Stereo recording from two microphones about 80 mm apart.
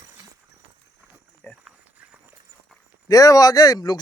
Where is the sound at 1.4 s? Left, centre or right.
Centre.